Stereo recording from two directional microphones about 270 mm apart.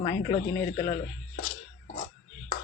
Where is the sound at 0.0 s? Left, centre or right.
Centre.